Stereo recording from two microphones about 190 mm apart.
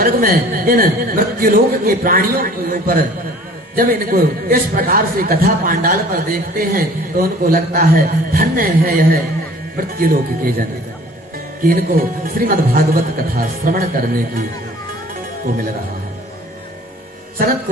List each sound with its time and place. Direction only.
0.0 s a man's voice: 50° right (ahead or behind)
11.6 s a man's voice: 50° right (ahead or behind)